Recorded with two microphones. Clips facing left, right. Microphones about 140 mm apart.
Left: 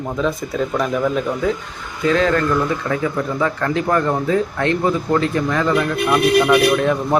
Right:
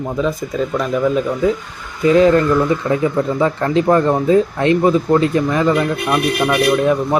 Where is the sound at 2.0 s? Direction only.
15° right (ahead or behind).